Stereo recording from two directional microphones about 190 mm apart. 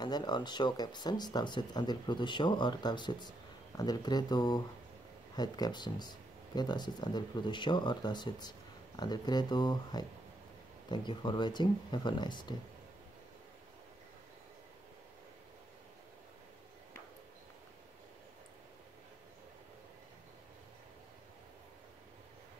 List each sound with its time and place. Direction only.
0.0 s speech: 20° left (ahead or behind)